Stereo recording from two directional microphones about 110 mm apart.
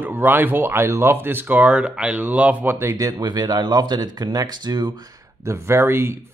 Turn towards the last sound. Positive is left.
turn(degrees=-20)  # may be behind; listen again after turning